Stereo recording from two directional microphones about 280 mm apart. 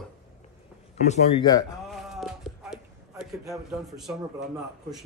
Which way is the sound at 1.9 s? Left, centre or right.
Centre.